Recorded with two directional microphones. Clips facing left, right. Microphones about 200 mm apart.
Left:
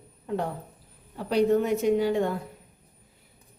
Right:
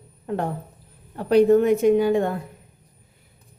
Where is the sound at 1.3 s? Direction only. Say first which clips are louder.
Right 7 dB; 50° right (ahead or behind).